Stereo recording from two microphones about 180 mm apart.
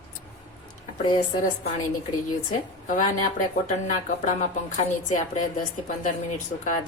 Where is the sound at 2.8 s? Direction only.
45° left (ahead or behind).